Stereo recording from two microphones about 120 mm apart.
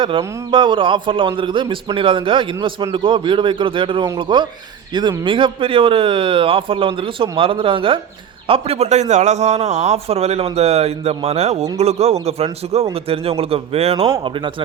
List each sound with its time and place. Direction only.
0.5 s a man's voice: 45° right (ahead or behind)
14.3 s speech: 45° right (ahead or behind)